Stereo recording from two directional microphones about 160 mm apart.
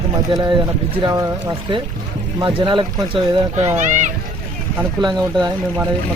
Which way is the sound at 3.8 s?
50° right (ahead or behind).